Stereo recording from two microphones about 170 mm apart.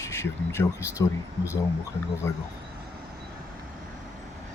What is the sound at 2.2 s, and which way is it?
Speech, 15° left (ahead or behind).